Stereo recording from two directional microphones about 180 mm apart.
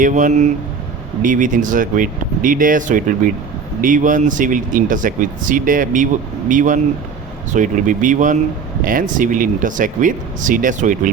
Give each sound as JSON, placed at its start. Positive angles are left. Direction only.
{"t": 0.0, "sound": "speech", "side_deg": -45}